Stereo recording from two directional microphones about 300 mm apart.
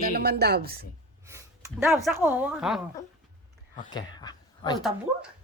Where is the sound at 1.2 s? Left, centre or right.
Centre.